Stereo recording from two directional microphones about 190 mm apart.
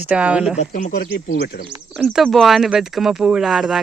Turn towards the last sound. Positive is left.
turn(degrees=0)  # may be behind; listen again after turning